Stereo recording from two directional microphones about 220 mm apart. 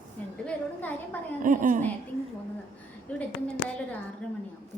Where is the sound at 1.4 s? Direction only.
35° right (ahead or behind).